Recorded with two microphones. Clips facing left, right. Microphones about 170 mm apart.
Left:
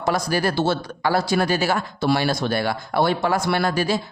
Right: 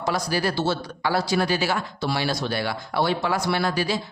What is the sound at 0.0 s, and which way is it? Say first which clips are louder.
Speech: left 3 dB; 50° left (ahead or behind).